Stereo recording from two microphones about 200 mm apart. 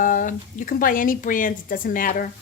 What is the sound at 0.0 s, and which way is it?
Speech, 40° left (ahead or behind).